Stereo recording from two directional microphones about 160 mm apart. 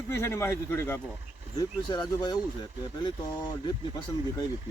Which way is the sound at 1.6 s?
25° left (ahead or behind).